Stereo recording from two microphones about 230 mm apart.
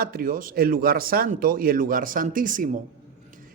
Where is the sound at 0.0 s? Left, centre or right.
Right.